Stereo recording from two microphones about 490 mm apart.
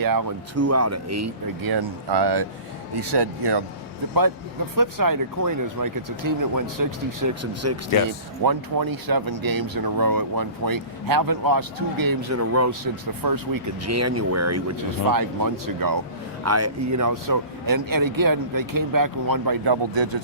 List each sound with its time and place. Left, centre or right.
0.0 s speech: right
0.5 s speech: right
1.6 s speech: right
8.4 s speech: right
16.4 s speech: right